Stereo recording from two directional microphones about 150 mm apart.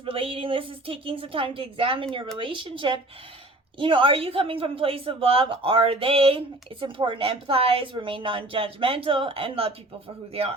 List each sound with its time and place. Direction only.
0.0 s a woman's voice: 35° right (ahead or behind)